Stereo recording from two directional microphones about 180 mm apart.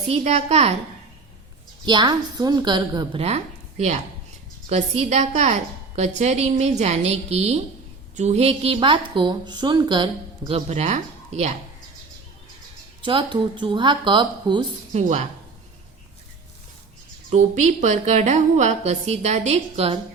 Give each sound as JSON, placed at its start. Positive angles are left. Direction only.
{"t": 0.1, "sound": "a woman's voice", "side_deg": -35}
{"t": 1.8, "sound": "a woman's voice", "side_deg": -25}
{"t": 10.7, "sound": "speech", "side_deg": -35}
{"t": 13.0, "sound": "a woman's voice", "side_deg": -30}
{"t": 14.9, "sound": "a woman's voice", "side_deg": -40}
{"t": 17.3, "sound": "a woman's voice", "side_deg": -40}